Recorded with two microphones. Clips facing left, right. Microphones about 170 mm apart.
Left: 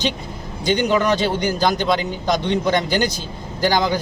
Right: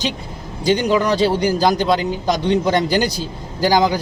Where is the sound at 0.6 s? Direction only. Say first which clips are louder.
Right 2 dB; 35° right (ahead or behind).